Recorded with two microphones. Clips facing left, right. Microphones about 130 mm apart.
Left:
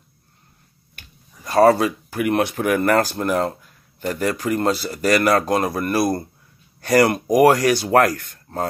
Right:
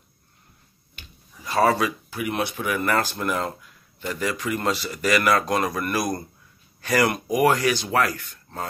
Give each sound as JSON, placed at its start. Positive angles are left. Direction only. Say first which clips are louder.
{"t": 0.9, "sound": "speech", "louder": "even", "side_deg": 45}